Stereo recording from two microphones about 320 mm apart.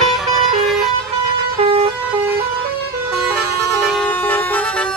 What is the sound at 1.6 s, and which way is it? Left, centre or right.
Vehicle, centre.